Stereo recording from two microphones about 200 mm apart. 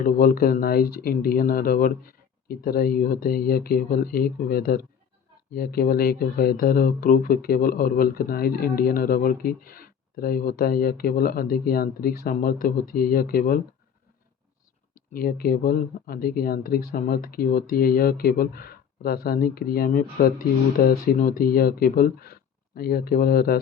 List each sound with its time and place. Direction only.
0.0 s speech: 45° left (ahead or behind)
15.1 s speech: 50° left (ahead or behind)